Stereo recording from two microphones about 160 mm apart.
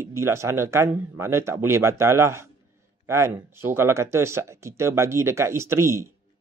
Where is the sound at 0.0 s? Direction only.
15° right (ahead or behind).